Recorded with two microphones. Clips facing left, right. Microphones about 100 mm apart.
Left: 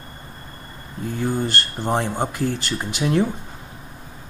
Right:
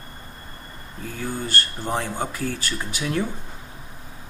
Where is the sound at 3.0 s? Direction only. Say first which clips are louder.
Left 6 dB; 30° left (ahead or behind).